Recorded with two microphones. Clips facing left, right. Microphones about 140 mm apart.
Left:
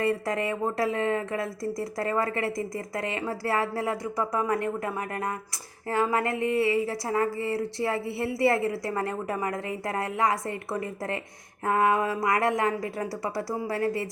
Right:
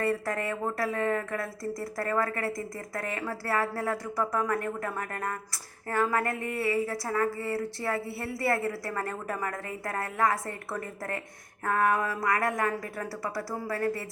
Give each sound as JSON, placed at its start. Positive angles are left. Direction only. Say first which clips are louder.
{"t": 0.0, "sound": "a woman's voice", "louder": "left 3 dB", "side_deg": 20}